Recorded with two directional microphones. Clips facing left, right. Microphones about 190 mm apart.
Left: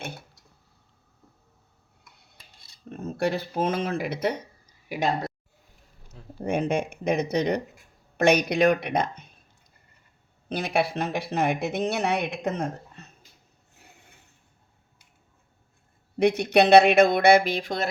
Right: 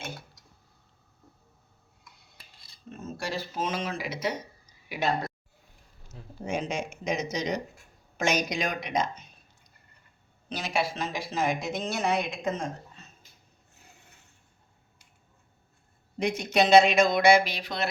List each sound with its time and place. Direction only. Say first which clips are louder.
2.9 s speech: left 7 dB; 60° left (ahead or behind)
6.4 s speech: left 6 dB; 60° left (ahead or behind)
10.5 s speech: left 5 dB; 55° left (ahead or behind)
16.1 s speech: left 6 dB; 60° left (ahead or behind)